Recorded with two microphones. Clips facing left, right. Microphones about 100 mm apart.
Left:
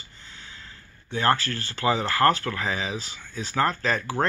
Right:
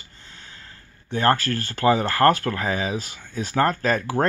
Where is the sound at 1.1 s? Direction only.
45° right (ahead or behind).